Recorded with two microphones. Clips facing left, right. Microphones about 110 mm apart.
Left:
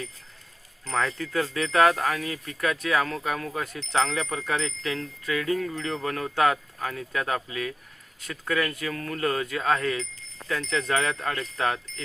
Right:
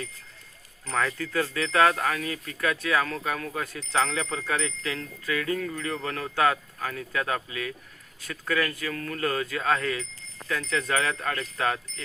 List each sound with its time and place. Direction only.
0.9 s speech: 20° left (ahead or behind)